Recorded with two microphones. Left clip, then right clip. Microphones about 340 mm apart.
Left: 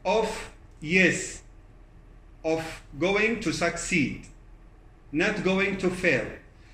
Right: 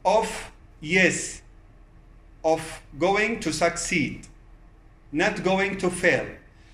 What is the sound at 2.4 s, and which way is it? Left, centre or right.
A man's voice, right.